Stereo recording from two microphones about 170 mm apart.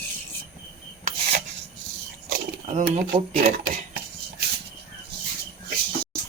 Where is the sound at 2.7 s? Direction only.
40° right (ahead or behind).